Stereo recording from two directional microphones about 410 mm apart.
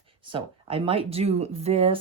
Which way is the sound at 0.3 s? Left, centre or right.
Centre.